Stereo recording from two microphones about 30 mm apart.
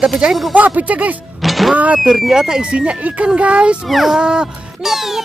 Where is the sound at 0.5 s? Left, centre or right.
Right.